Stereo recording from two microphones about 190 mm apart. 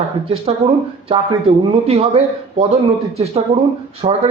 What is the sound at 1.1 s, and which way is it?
A man's voice, 30° right (ahead or behind).